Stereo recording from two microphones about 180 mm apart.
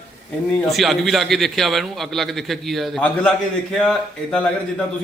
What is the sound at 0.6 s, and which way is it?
A man's voice, centre (ahead or behind).